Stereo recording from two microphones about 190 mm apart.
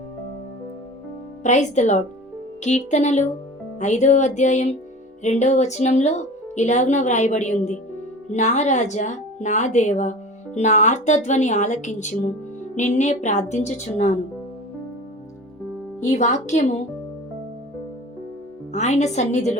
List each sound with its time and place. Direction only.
1.5 s a woman's voice: 40° left (ahead or behind)
16.0 s a woman's voice: 40° left (ahead or behind)
18.7 s a woman's voice: 40° left (ahead or behind)